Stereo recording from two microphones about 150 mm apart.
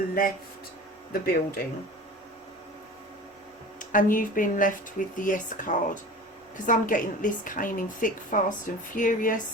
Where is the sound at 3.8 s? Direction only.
60° left (ahead or behind).